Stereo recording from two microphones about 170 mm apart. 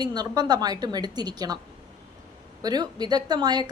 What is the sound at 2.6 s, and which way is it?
Speech, 25° right (ahead or behind).